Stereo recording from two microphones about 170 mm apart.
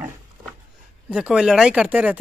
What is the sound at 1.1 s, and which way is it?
Speech, 5° right (ahead or behind).